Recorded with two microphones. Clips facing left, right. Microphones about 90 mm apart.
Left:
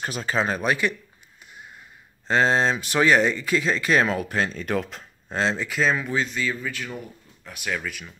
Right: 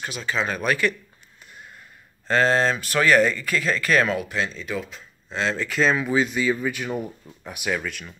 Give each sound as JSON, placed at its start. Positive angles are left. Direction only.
{"t": 0.0, "sound": "speech", "side_deg": 40}
{"t": 0.6, "sound": "speech", "side_deg": 20}
{"t": 1.5, "sound": "a sound", "side_deg": 15}
{"t": 2.2, "sound": "speech", "side_deg": 20}
{"t": 4.2, "sound": "speech", "side_deg": 45}
{"t": 5.3, "sound": "speech", "side_deg": 30}
{"t": 5.6, "sound": "speech", "side_deg": 5}
{"t": 7.8, "sound": "speech", "side_deg": 0}